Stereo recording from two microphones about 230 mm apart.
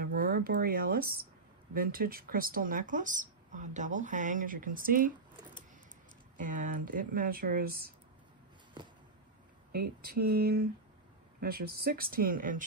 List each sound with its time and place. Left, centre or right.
0.0 s speech: right
6.4 s speech: right
9.7 s speech: right